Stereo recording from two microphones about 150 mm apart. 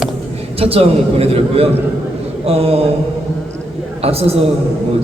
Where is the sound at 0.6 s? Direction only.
40° right (ahead or behind).